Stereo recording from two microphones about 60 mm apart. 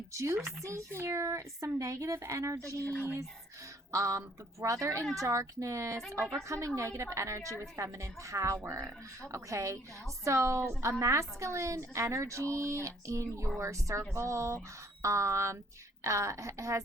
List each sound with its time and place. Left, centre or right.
0.1 s a child's voice: right
1.8 s a woman's voice: right
2.8 s a woman's voice: left
3.9 s a woman's voice: right